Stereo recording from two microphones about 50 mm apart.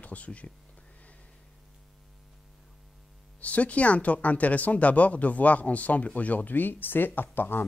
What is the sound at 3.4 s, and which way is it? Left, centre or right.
Speech, left.